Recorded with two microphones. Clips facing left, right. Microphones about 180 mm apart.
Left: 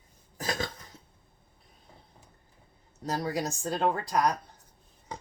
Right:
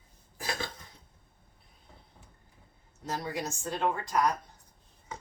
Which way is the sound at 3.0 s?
35° left (ahead or behind).